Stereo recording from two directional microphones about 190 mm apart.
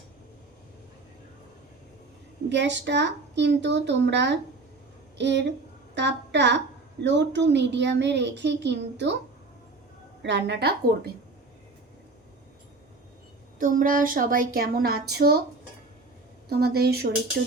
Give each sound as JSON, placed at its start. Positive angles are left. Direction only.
{"t": 2.5, "sound": "a woman's voice", "side_deg": -65}
{"t": 10.2, "sound": "a woman's voice", "side_deg": -65}
{"t": 13.6, "sound": "speech", "side_deg": -45}
{"t": 16.5, "sound": "a woman's voice", "side_deg": -55}